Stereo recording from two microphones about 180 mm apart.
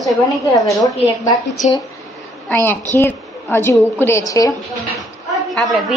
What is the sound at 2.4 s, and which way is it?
A woman's voice, 10° left (ahead or behind).